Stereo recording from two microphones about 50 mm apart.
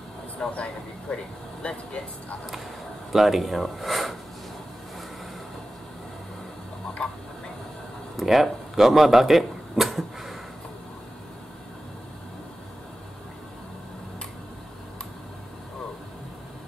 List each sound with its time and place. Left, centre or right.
0.4 s speech: centre
3.1 s speech: centre
7.0 s a sound: centre
8.2 s speech: centre